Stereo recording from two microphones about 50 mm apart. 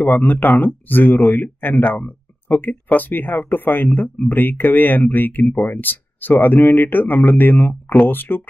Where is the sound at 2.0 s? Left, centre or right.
Left.